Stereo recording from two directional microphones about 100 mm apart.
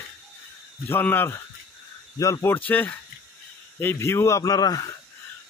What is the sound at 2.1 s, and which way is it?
Speech, 35° left (ahead or behind).